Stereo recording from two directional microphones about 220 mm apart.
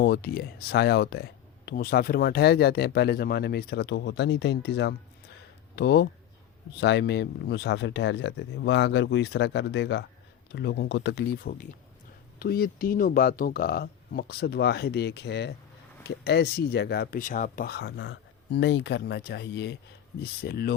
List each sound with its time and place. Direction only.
0.0 s speech: 45° left (ahead or behind)